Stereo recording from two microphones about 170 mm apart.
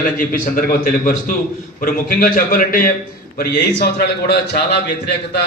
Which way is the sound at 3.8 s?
70° left (ahead or behind).